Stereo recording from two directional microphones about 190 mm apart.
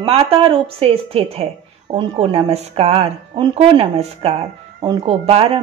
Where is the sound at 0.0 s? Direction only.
30° right (ahead or behind).